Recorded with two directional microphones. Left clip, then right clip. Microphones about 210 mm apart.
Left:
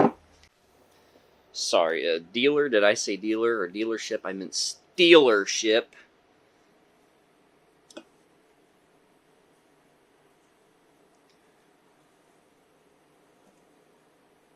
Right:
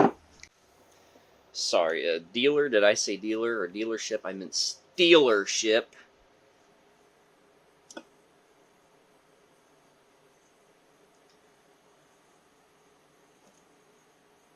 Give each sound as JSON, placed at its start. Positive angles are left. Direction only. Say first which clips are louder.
{"t": 1.5, "sound": "speech", "louder": "left 2 dB", "side_deg": 20}